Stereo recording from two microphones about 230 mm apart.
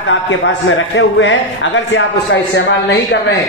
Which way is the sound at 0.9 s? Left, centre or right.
Left.